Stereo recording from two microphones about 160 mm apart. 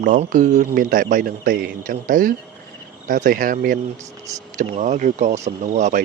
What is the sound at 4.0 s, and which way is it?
Speech, 20° right (ahead or behind).